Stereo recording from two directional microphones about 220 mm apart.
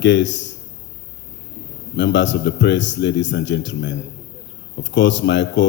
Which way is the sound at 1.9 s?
55° left (ahead or behind).